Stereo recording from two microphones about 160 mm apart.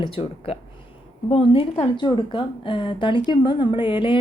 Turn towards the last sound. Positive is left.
turn(degrees=30)  # may be behind; listen again after turning